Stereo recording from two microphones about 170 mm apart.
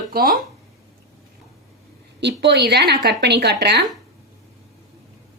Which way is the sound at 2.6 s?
75° right (ahead or behind).